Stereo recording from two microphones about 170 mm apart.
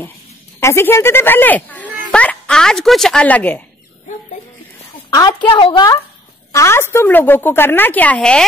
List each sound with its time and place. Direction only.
0.6 s a woman's voice: 15° left (ahead or behind)
5.1 s a woman's voice: 25° left (ahead or behind)
6.5 s a woman's voice: 15° left (ahead or behind)